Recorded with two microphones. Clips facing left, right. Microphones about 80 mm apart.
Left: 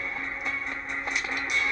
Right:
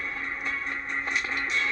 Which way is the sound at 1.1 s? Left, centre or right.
Centre.